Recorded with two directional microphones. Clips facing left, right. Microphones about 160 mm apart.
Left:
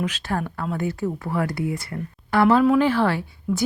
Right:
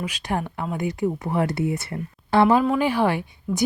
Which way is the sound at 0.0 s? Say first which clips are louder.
Left 1 dB; 15° right (ahead or behind).